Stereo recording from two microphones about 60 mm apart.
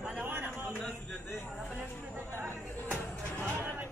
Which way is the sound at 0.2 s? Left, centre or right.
Right.